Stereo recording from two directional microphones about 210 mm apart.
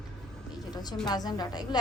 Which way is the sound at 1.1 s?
20° left (ahead or behind).